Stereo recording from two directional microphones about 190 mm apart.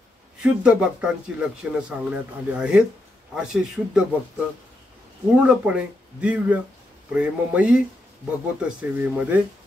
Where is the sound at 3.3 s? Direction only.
5° right (ahead or behind).